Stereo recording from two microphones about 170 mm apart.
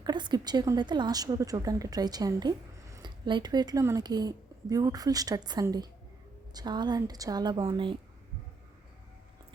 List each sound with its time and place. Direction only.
0.0 s a woman's voice: 25° right (ahead or behind)